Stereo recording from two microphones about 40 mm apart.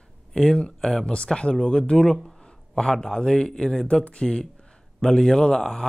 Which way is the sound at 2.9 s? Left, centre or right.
Centre.